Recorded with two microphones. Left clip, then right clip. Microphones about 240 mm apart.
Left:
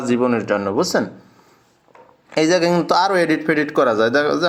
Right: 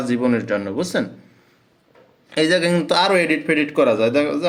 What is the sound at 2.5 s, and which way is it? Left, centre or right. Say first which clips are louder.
Speech: left 2 dB; centre.